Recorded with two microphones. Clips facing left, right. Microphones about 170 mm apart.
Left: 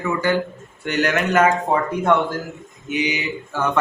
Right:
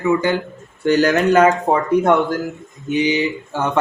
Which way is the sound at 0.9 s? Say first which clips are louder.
Right 6 dB; 35° right (ahead or behind).